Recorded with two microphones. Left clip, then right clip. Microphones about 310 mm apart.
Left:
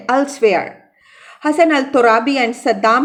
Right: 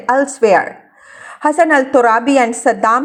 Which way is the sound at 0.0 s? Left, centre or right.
Centre.